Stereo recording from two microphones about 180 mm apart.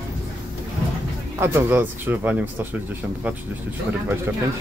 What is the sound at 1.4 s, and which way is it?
Speech, 10° right (ahead or behind).